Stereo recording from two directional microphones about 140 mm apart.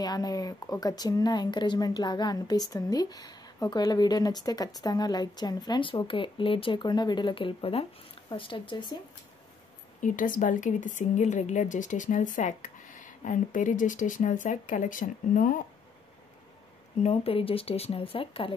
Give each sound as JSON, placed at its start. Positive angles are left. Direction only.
{"t": 0.0, "sound": "speech", "side_deg": 30}
{"t": 10.0, "sound": "speech", "side_deg": 75}
{"t": 17.0, "sound": "speech", "side_deg": 45}